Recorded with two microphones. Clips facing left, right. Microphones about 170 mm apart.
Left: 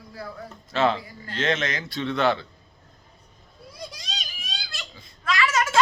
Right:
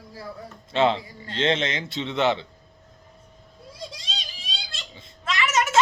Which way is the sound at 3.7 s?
25° right (ahead or behind).